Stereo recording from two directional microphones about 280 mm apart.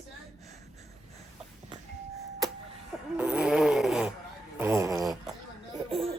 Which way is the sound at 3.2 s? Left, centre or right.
Centre.